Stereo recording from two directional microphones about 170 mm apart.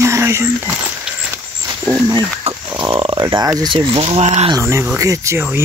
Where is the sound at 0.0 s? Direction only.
15° right (ahead or behind).